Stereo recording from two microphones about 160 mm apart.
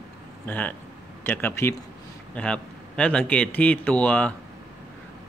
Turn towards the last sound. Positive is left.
turn(degrees=10)  # may be behind; listen again after turning